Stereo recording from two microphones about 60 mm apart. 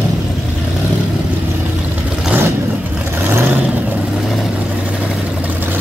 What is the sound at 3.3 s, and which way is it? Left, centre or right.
Vehicle, right.